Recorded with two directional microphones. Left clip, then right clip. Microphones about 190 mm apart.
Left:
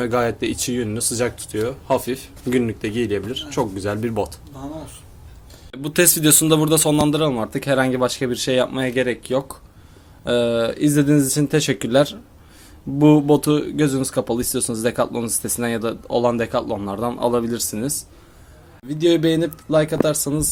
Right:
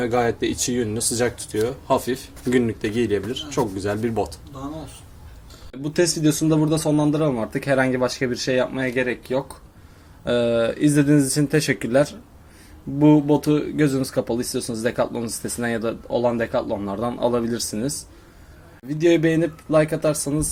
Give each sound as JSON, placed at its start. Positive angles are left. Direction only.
{"t": 0.0, "sound": "speech", "side_deg": 15}
{"t": 5.7, "sound": "speech", "side_deg": 5}
{"t": 7.3, "sound": "speech", "side_deg": 10}
{"t": 10.2, "sound": "speech", "side_deg": 5}
{"t": 13.0, "sound": "speech", "side_deg": 35}
{"t": 13.4, "sound": "speech", "side_deg": 15}
{"t": 18.9, "sound": "speech", "side_deg": 10}
{"t": 19.7, "sound": "speech", "side_deg": 35}